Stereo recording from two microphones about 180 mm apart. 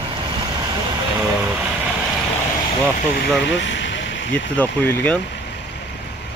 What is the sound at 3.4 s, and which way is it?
Vehicle, 85° left.